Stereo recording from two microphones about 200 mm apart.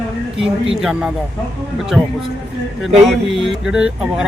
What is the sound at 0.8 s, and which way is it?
Speech, 5° right (ahead or behind).